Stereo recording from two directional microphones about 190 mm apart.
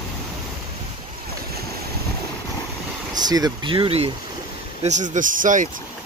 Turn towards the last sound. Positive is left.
turn(degrees=-45)  # may be behind; listen again after turning